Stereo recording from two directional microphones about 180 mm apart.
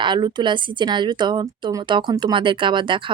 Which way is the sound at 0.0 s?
25° right (ahead or behind).